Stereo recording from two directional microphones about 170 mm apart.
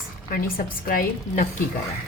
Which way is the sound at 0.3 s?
55° left (ahead or behind).